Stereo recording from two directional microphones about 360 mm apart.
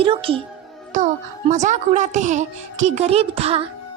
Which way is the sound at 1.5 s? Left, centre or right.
Centre.